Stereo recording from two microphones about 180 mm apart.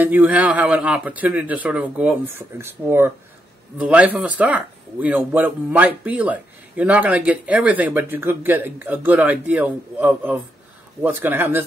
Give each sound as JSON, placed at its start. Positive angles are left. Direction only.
{"t": 0.0, "sound": "speech", "side_deg": -10}